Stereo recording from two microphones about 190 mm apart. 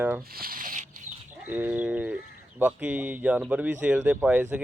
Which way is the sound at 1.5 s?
10° right (ahead or behind).